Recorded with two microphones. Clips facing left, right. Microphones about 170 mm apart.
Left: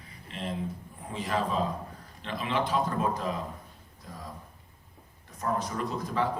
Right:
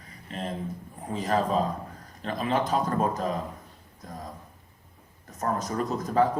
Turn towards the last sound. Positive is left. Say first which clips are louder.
# right 6 dB
turn(degrees=-45)  # may be behind; listen again after turning